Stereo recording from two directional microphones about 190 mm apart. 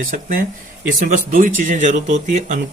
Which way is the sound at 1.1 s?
45° right (ahead or behind).